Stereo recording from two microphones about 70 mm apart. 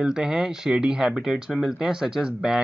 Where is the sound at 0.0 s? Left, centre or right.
Centre.